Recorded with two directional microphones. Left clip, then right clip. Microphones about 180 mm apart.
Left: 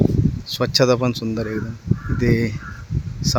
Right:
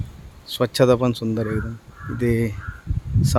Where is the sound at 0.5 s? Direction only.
5° right (ahead or behind).